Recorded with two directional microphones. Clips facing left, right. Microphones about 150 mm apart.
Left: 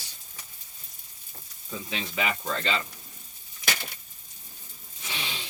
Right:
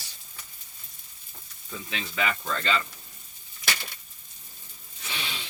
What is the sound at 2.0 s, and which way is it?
Speech, 15° left (ahead or behind).